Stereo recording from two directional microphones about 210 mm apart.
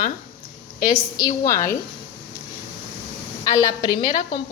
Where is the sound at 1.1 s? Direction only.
15° left (ahead or behind).